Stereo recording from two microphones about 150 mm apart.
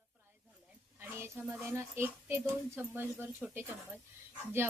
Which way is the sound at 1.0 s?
15° right (ahead or behind).